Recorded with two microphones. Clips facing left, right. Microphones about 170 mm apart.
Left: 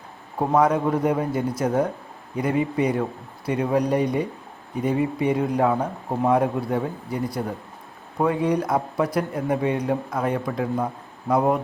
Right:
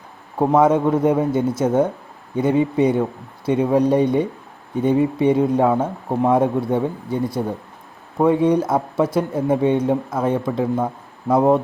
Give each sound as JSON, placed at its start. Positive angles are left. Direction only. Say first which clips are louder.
{"t": 0.3, "sound": "speech", "louder": "right 4 dB", "side_deg": -25}